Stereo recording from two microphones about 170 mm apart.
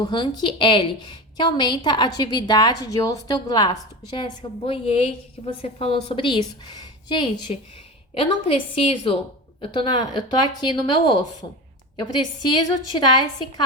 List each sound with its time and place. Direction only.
0.0 s a woman's voice: 25° left (ahead or behind)
12.4 s a woman's voice: 25° left (ahead or behind)